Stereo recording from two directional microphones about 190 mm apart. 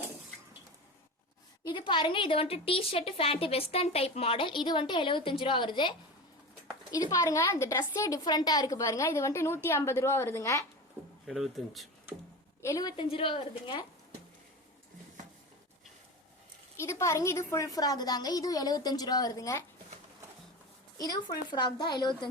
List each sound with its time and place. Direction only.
1.6 s a woman's voice: 25° left (ahead or behind)
11.3 s speech: centre (ahead or behind)
12.6 s a woman's voice: 20° left (ahead or behind)
16.7 s a woman's voice: 15° left (ahead or behind)
21.0 s a woman's voice: 20° left (ahead or behind)